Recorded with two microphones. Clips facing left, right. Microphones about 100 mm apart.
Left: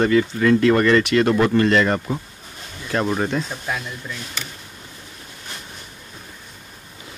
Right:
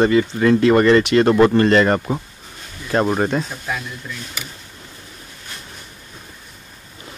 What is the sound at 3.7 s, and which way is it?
Speech, centre (ahead or behind).